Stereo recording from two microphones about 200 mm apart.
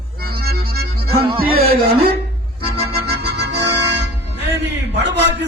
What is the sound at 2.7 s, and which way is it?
Music, 55° right (ahead or behind).